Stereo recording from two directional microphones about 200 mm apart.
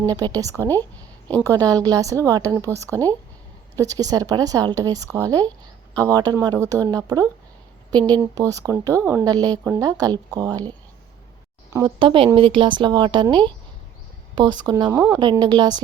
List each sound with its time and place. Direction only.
0.0 s speech: 20° right (ahead or behind)
11.9 s a woman's voice: 25° right (ahead or behind)
14.8 s speech: 10° right (ahead or behind)
15.2 s a woman's voice: 20° right (ahead or behind)